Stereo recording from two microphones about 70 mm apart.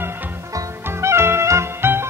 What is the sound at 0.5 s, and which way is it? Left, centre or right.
Music, right.